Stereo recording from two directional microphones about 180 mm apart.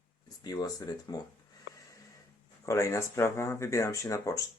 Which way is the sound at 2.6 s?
15° left (ahead or behind).